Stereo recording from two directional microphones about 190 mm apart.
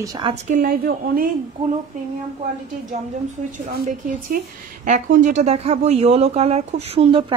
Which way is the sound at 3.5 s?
40° right (ahead or behind).